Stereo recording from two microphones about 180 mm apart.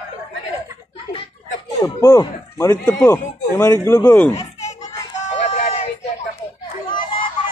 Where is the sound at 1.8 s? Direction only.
20° left (ahead or behind).